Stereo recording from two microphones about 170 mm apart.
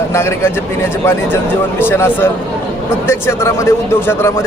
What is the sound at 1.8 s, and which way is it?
A man's voice, 15° left (ahead or behind).